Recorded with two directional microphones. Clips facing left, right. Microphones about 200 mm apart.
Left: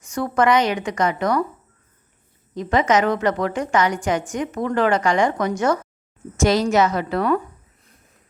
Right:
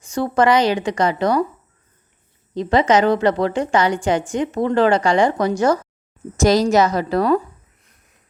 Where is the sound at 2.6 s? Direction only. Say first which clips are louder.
Right 3 dB; 30° right (ahead or behind).